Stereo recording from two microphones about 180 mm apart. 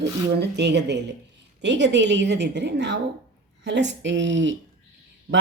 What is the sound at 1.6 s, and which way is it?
A woman's voice, 85° right.